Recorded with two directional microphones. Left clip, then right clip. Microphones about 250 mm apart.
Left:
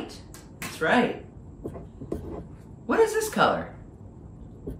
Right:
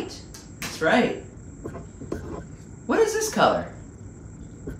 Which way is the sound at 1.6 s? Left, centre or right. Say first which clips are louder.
Right 1 dB; centre.